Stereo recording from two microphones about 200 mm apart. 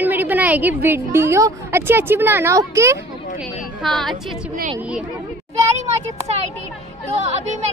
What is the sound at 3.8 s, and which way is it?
Speech, centre (ahead or behind).